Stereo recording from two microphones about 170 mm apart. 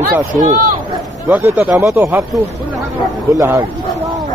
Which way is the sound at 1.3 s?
10° right (ahead or behind).